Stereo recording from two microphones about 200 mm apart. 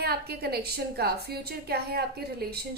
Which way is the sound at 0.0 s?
50° right (ahead or behind).